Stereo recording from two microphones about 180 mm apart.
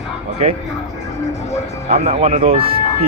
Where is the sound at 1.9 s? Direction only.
35° right (ahead or behind).